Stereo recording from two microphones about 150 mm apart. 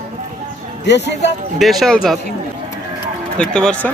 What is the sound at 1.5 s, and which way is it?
Speech, centre (ahead or behind).